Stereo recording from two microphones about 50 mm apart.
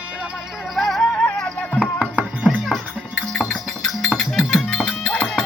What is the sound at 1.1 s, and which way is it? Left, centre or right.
Music, centre.